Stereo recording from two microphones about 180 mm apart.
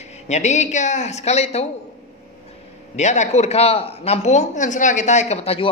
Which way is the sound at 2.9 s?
40° left (ahead or behind).